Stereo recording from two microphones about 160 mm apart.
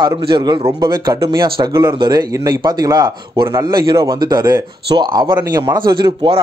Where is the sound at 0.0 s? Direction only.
30° right (ahead or behind).